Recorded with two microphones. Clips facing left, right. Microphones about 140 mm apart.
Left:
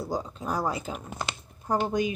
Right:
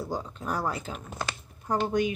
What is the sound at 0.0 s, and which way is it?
Speech, 15° left (ahead or behind).